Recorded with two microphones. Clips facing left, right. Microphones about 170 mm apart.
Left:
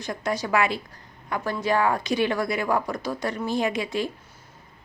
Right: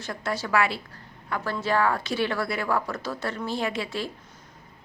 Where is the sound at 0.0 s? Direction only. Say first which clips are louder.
Left 3 dB; 15° left (ahead or behind).